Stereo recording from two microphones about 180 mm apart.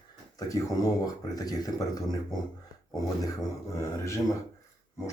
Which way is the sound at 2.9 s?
20° left (ahead or behind).